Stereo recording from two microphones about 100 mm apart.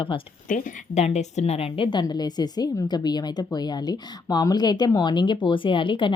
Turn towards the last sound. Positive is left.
turn(degrees=55)  # may be behind; listen again after turning